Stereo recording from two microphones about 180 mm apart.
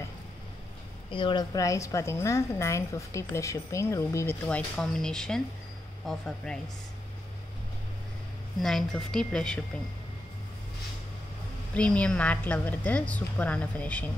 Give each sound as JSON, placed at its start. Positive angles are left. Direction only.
{"t": 1.1, "sound": "a woman's voice", "side_deg": 25}
{"t": 8.5, "sound": "speech", "side_deg": 0}
{"t": 11.7, "sound": "a woman's voice", "side_deg": 5}